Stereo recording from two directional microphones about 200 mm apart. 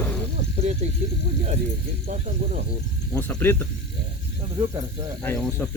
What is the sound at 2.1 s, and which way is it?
Speech, 40° right (ahead or behind).